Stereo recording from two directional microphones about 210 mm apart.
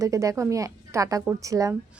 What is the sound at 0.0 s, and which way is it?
A woman's voice, 15° right (ahead or behind).